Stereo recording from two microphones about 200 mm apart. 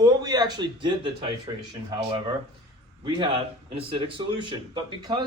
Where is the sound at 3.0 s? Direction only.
25° right (ahead or behind).